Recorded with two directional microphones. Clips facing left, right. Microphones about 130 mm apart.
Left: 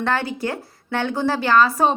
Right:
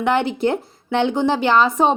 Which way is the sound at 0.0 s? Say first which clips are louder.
Right 5 dB; 20° right (ahead or behind).